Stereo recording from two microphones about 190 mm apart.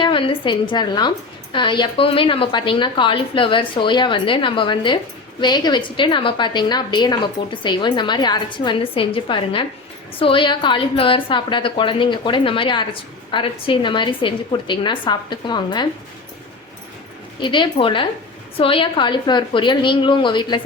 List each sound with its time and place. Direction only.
0.0 s a woman's voice: 25° left (ahead or behind)
17.4 s a woman's voice: 25° left (ahead or behind)